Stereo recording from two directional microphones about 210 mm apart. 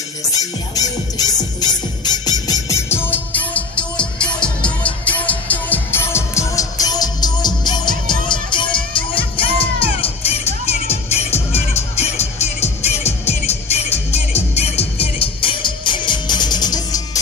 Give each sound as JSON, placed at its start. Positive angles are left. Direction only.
{"t": 0.4, "sound": "music", "side_deg": 15}